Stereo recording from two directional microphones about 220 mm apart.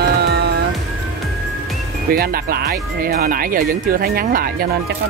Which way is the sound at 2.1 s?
45° right (ahead or behind).